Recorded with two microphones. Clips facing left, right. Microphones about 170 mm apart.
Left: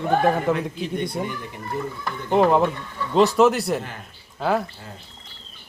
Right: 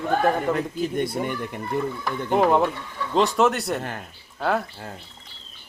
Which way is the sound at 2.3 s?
Centre (ahead or behind).